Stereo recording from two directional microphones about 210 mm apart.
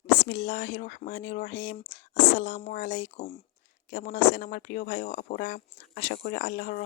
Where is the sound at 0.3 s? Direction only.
40° left (ahead or behind).